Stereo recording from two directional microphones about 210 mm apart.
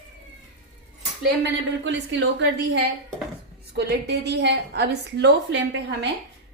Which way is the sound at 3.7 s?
50° right (ahead or behind).